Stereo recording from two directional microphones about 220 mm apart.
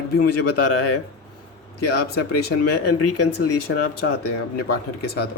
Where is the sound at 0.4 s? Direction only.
90° left.